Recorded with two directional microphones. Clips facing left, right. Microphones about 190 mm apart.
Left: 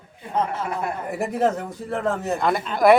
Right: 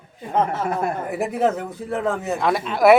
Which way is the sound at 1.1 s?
Centre (ahead or behind).